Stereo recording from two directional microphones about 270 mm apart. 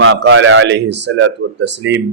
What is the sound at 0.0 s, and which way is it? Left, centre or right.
Speech, right.